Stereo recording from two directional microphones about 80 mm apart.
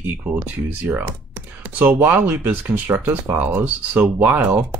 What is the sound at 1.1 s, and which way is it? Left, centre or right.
Computer keyboard, right.